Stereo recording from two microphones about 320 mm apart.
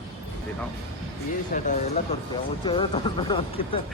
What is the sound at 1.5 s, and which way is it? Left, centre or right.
Speech, left.